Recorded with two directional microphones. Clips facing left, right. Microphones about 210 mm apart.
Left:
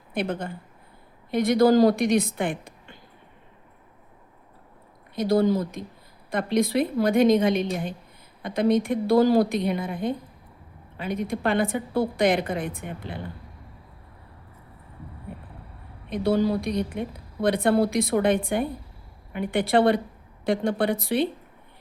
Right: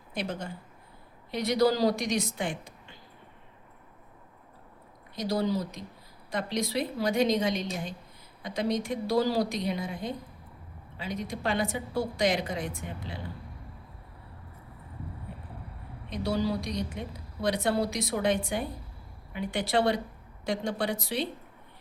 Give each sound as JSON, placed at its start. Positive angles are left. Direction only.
{"t": 0.1, "sound": "a woman's voice", "side_deg": 55}
{"t": 5.1, "sound": "a woman's voice", "side_deg": 55}
{"t": 16.0, "sound": "a woman's voice", "side_deg": 55}